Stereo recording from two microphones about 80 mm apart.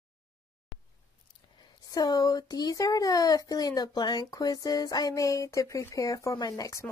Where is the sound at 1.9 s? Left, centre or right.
Left.